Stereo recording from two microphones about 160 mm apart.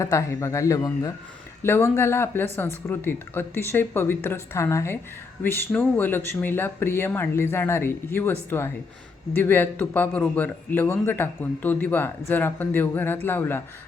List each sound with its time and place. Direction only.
0.0 s a man's voice: 20° left (ahead or behind)